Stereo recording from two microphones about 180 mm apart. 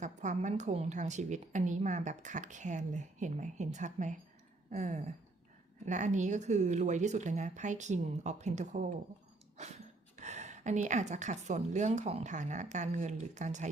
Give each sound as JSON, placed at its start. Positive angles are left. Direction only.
{"t": 0.0, "sound": "a woman's voice", "side_deg": -40}
{"t": 10.2, "sound": "a woman's voice", "side_deg": -40}